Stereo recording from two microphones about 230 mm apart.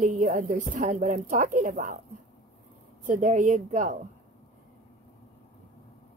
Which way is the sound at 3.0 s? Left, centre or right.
Right.